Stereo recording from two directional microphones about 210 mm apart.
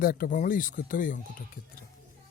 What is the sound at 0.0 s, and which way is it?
Speech, 45° left (ahead or behind).